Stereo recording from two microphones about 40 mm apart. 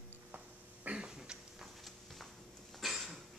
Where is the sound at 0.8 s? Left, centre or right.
Right.